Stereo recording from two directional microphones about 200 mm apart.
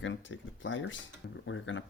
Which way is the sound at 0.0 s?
70° left (ahead or behind).